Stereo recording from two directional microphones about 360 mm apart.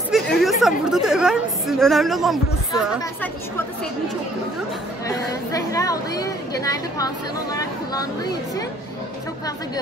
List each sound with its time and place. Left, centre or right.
0.1 s speech: centre
5.0 s speech: centre
8.2 s speech: centre